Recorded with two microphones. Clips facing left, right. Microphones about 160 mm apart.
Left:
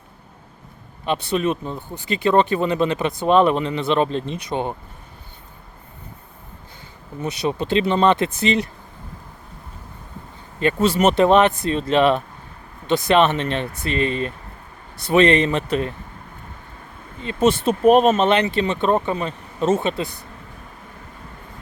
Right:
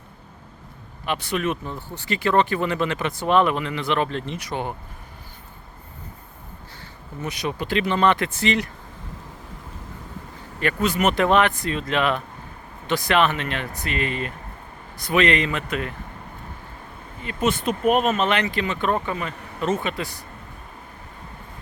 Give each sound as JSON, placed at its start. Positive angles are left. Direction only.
{"t": 1.0, "sound": "speech", "side_deg": 25}
{"t": 7.2, "sound": "speech", "side_deg": 25}
{"t": 10.6, "sound": "speech", "side_deg": 25}
{"t": 17.3, "sound": "speech", "side_deg": 25}